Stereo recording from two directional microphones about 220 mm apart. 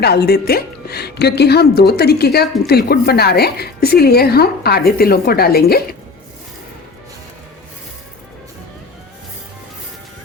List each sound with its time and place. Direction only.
0.0 s a woman's voice: 45° left (ahead or behind)